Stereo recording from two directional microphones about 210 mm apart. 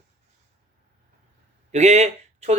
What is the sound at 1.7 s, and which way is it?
Speech, 30° right (ahead or behind).